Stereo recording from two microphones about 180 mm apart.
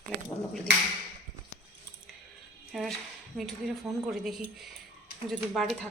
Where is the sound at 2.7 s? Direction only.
Centre (ahead or behind).